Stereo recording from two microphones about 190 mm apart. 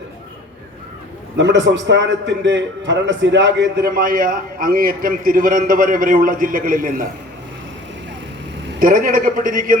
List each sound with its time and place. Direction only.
1.4 s a man's voice: 70° right (ahead or behind)
3.9 s a man's voice: 50° right (ahead or behind)
8.8 s a man's voice: 45° right (ahead or behind)